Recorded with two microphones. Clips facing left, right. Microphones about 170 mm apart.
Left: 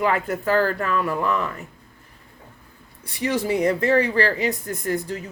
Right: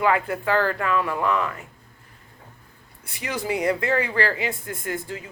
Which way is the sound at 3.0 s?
30° left (ahead or behind).